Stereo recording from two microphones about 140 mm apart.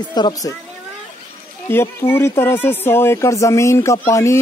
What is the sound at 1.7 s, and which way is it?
Speech, 15° left (ahead or behind).